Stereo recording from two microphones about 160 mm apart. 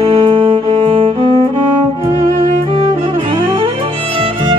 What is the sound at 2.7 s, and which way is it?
Music, 30° right (ahead or behind).